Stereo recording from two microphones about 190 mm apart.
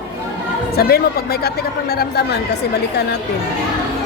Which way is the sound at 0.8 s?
55° left (ahead or behind).